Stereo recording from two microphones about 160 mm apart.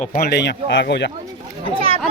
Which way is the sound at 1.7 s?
35° right (ahead or behind).